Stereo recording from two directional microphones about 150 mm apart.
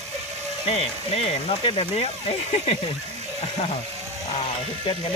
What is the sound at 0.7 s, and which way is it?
Speech, 40° left (ahead or behind).